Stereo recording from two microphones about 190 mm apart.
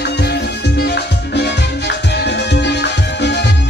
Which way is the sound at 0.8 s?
60° left (ahead or behind).